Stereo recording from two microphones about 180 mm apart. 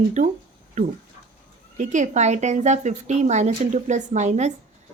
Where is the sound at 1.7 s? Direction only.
40° right (ahead or behind).